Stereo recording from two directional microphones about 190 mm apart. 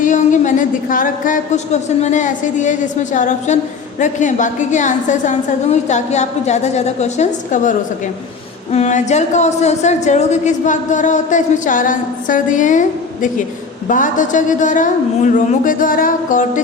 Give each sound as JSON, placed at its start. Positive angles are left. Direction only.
{"t": 0.0, "sound": "speech", "side_deg": 40}
{"t": 13.8, "sound": "speech", "side_deg": 45}